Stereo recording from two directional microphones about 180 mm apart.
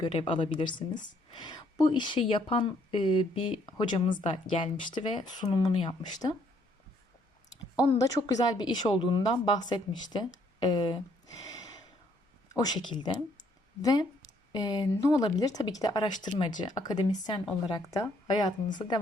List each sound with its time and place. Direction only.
0.0 s a woman's voice: 30° left (ahead or behind)
8.0 s a woman's voice: 20° left (ahead or behind)
12.7 s a woman's voice: 25° left (ahead or behind)